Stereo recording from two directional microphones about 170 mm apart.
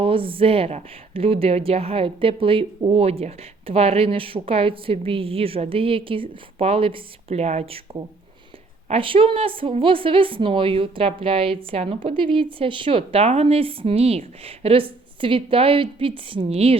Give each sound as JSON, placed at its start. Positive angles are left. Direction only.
{"t": 0.0, "sound": "speech", "side_deg": -30}